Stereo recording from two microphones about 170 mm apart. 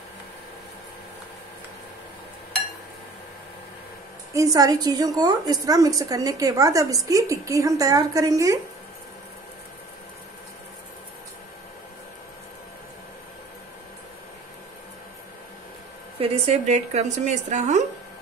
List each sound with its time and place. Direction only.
4.3 s a woman's voice: 20° right (ahead or behind)
16.2 s a woman's voice: 40° right (ahead or behind)